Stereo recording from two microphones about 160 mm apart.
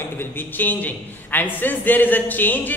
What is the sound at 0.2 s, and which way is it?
A man's voice, 10° left (ahead or behind).